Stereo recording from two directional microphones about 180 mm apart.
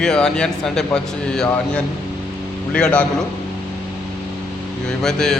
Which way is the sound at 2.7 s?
5° left (ahead or behind).